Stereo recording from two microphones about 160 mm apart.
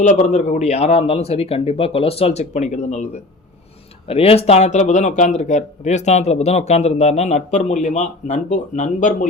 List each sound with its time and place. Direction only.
0.0 s a man's voice: 50° left (ahead or behind)
4.1 s a man's voice: 40° left (ahead or behind)